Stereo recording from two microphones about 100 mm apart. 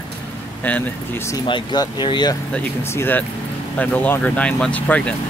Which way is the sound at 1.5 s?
50° left (ahead or behind).